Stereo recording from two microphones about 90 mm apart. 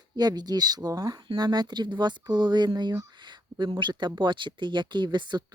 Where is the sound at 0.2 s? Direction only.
50° right (ahead or behind).